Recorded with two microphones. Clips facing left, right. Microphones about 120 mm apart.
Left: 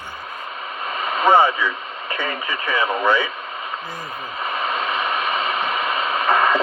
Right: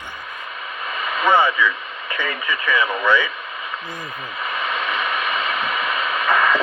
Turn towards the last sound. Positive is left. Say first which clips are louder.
# left 1 dB
turn(degrees=35)  # may be behind; listen again after turning